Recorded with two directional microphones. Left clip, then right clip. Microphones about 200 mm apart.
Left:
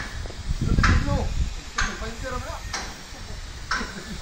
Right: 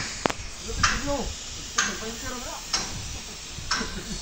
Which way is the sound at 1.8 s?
55° right (ahead or behind).